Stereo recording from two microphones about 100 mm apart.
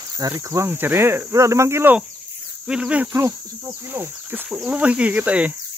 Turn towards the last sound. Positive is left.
turn(degrees=-15)  # may be behind; listen again after turning